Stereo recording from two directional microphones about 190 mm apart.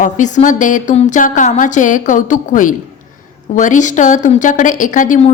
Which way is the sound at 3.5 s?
40° left (ahead or behind).